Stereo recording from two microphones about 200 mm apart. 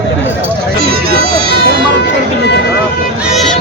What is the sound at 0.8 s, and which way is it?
Music, 50° right (ahead or behind).